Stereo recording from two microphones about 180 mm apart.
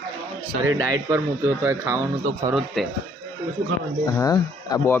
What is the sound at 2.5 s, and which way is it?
Speech, centre (ahead or behind).